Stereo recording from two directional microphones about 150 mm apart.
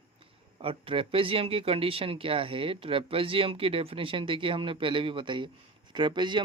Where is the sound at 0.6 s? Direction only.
35° right (ahead or behind).